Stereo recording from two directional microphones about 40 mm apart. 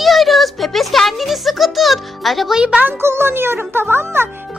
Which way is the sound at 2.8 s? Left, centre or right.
Right.